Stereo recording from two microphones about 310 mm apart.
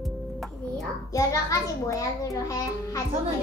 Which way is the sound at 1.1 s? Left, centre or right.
Centre.